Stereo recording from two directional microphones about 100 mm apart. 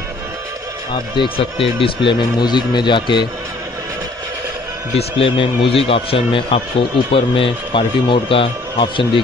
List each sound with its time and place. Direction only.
0.9 s a man's voice: 55° left (ahead or behind)
4.9 s speech: 65° left (ahead or behind)